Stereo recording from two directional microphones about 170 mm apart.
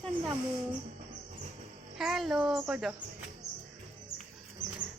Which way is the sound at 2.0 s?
Centre (ahead or behind).